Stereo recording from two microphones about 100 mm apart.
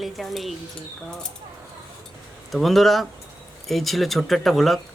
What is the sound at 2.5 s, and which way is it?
Speech, centre (ahead or behind).